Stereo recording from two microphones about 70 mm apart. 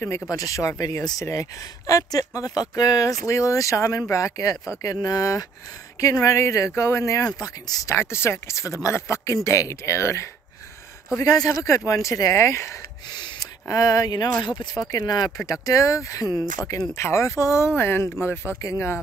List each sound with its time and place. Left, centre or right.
0.3 s speech: left
7.4 s speech: left
7.9 s speech: left
11.2 s speech: left
13.1 s gasp: left
13.7 s speech: left
14.4 s speech: left
15.4 s speech: left
18.6 s speech: left